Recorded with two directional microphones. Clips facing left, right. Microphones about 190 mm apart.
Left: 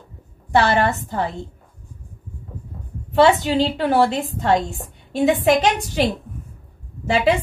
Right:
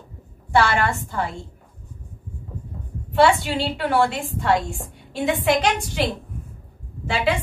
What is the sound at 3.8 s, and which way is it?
Speech, 40° left (ahead or behind).